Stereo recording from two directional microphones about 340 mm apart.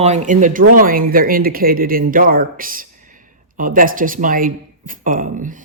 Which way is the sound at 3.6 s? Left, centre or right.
Right.